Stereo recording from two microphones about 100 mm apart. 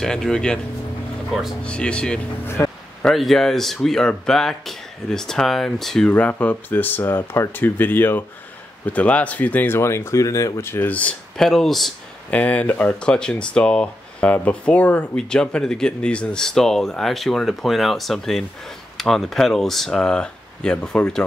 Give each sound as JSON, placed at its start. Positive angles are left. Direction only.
{"t": 0.0, "sound": "speech", "side_deg": 5}
{"t": 1.6, "sound": "speech", "side_deg": 10}
{"t": 2.4, "sound": "speech", "side_deg": 25}
{"t": 3.0, "sound": "speech", "side_deg": 5}
{"t": 6.0, "sound": "speech", "side_deg": 15}
{"t": 11.4, "sound": "speech", "side_deg": 5}
{"t": 12.3, "sound": "speech", "side_deg": 15}